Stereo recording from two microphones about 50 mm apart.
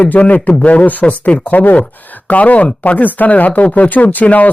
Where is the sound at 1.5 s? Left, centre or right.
Left.